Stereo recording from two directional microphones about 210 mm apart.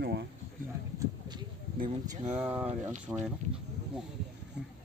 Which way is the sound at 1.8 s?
30° right (ahead or behind).